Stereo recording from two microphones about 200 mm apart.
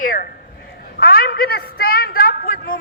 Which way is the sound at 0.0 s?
45° left (ahead or behind).